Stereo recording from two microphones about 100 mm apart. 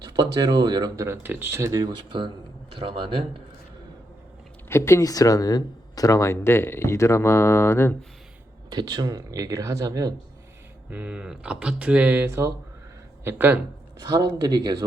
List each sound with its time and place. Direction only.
0.0 s speech: 40° right (ahead or behind)
1.0 s speech: 20° right (ahead or behind)
2.8 s speech: 60° right (ahead or behind)
4.7 s speech: 30° left (ahead or behind)
8.7 s speech: 45° right (ahead or behind)
10.8 s speech: 15° right (ahead or behind)
14.0 s speech: 40° right (ahead or behind)